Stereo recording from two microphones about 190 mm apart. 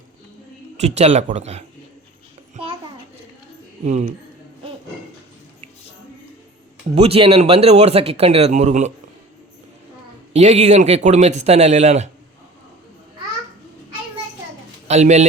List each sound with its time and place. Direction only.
0.8 s speech: 35° right (ahead or behind)
3.8 s speech: 35° right (ahead or behind)
6.9 s speech: 30° right (ahead or behind)
10.3 s speech: 35° right (ahead or behind)
14.8 s a man's voice: 35° right (ahead or behind)